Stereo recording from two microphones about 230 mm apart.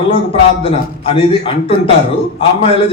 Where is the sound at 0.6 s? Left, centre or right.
Left.